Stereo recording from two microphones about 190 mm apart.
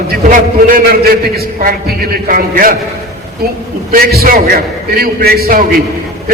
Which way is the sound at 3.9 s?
50° right (ahead or behind).